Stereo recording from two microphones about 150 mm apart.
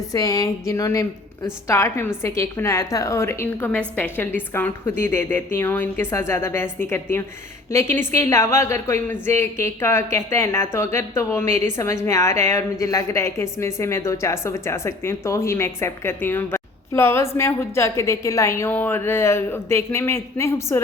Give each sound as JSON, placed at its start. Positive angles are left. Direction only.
{"t": 0.1, "sound": "a woman's voice", "side_deg": 25}